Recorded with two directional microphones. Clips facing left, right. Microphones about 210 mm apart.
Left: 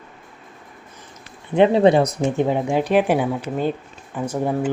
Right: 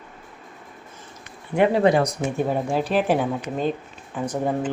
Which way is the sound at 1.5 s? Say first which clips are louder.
Left 4 dB; 25° left (ahead or behind).